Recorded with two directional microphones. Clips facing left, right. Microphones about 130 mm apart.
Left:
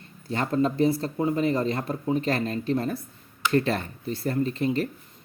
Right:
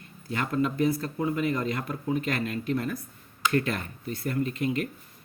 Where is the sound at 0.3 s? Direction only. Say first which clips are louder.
Left 3 dB; 35° left (ahead or behind).